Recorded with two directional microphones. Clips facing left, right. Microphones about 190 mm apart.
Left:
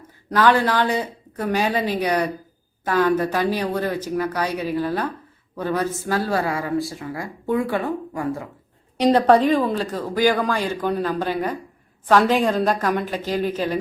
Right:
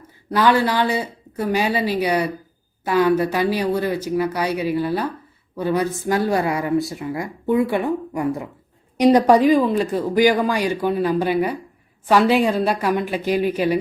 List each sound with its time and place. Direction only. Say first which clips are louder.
0.3 s speech: even; 10° right (ahead or behind)